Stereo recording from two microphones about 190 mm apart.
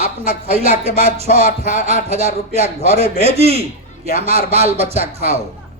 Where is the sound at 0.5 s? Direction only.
30° right (ahead or behind).